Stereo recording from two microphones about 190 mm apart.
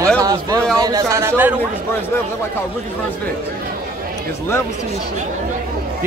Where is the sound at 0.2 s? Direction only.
20° right (ahead or behind).